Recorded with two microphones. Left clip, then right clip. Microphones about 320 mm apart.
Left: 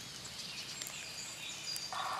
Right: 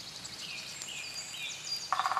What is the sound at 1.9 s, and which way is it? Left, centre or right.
Frog, right.